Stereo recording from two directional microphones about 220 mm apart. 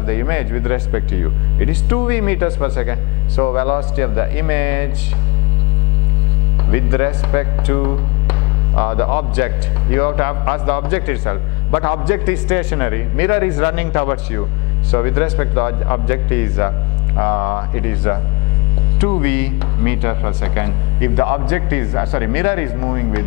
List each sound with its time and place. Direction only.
0.0 s speech: 15° left (ahead or behind)
6.7 s speech: 15° left (ahead or behind)